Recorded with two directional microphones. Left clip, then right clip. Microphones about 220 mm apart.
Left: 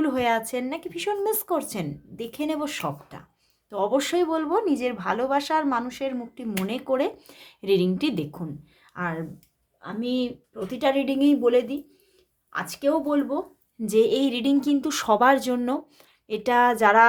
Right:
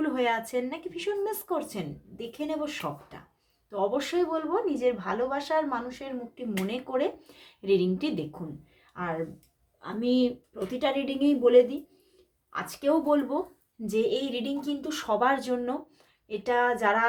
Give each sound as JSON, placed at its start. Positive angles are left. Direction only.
{"t": 0.0, "sound": "speech", "side_deg": 30}
{"t": 13.8, "sound": "speech", "side_deg": 35}